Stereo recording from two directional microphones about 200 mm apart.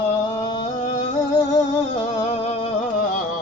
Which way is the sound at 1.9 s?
30° left (ahead or behind).